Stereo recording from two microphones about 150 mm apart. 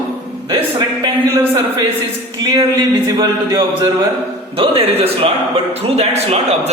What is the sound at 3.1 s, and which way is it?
Speech, 25° right (ahead or behind).